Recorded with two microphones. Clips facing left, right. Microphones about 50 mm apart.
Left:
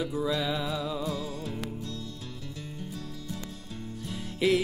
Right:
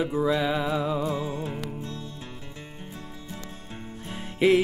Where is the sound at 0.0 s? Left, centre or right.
Right.